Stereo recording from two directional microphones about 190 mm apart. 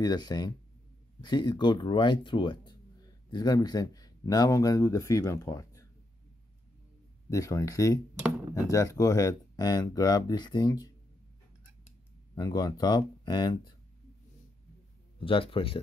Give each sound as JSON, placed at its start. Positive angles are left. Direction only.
{"t": 0.0, "sound": "speech", "side_deg": 20}
{"t": 7.2, "sound": "speech", "side_deg": 15}
{"t": 12.4, "sound": "speech", "side_deg": 20}
{"t": 15.1, "sound": "speech", "side_deg": 30}